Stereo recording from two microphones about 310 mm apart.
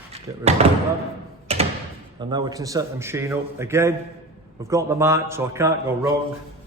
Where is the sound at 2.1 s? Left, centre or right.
Centre.